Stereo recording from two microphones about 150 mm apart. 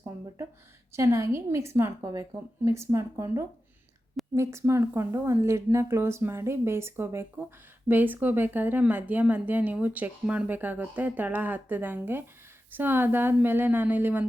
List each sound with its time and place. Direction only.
0.9 s a woman's voice: 20° right (ahead or behind)